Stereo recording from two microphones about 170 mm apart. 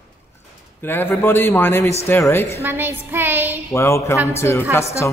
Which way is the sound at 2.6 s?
10° right (ahead or behind).